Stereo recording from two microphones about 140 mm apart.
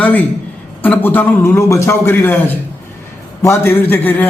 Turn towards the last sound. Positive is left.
turn(degrees=15)  # may be behind; listen again after turning